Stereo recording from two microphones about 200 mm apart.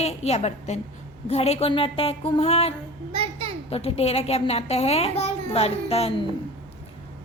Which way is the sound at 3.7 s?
30° left (ahead or behind).